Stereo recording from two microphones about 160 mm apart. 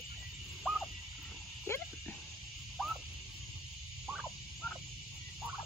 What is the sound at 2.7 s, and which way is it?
Fowl, centre (ahead or behind).